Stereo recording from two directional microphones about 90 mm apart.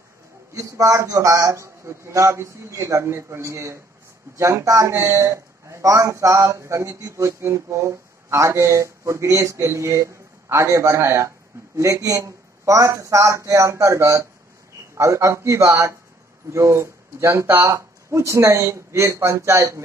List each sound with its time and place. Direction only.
0.6 s a man's voice: 35° right (ahead or behind)